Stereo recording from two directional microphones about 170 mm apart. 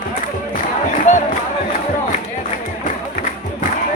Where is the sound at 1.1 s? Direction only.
50° left (ahead or behind).